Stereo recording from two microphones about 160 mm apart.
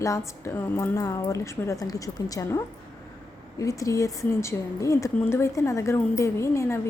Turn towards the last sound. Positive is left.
turn(degrees=15)  # may be behind; listen again after turning